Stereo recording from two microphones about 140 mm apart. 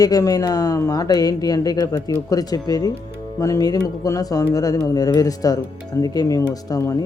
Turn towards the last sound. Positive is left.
turn(degrees=25)  # may be behind; listen again after turning